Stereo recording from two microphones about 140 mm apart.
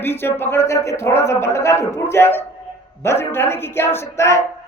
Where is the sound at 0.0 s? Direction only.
15° left (ahead or behind).